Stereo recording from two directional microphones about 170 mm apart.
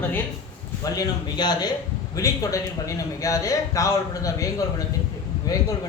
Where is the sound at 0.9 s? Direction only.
25° left (ahead or behind).